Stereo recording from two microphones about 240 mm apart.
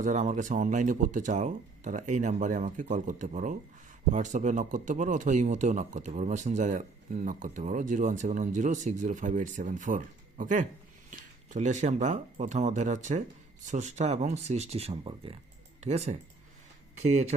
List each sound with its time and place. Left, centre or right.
0.0 s speech: right